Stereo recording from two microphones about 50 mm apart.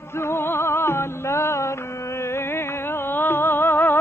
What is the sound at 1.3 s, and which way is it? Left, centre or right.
Mantra, left.